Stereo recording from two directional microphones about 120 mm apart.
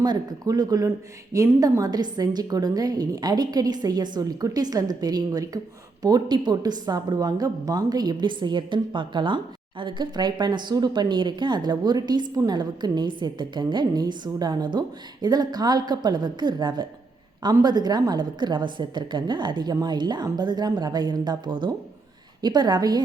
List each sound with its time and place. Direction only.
0.0 s a woman's voice: 35° right (ahead or behind)